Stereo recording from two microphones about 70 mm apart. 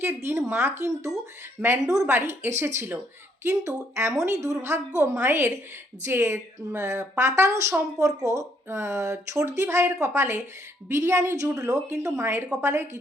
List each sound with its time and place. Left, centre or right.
0.0 s a woman's voice: right
5.2 s a woman's voice: right
9.6 s a woman's voice: right
11.5 s speech: right
12.0 s a woman's voice: right